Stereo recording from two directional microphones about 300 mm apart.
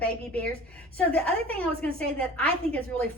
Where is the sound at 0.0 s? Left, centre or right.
Centre.